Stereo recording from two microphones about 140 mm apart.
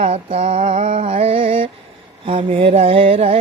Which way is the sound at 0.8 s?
60° right (ahead or behind).